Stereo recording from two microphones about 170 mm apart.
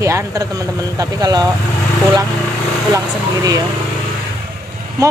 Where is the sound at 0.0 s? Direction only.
20° right (ahead or behind).